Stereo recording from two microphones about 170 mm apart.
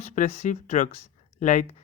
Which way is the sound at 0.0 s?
40° left (ahead or behind).